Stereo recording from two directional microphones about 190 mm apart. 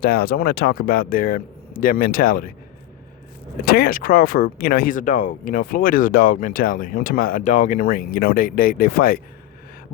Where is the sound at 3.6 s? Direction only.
50° left (ahead or behind).